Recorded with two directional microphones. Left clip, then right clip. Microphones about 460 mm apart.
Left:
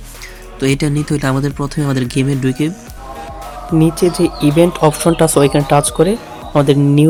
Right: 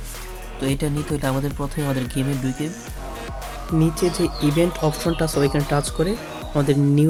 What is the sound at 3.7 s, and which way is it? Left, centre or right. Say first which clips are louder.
Speech: left 8 dB; right.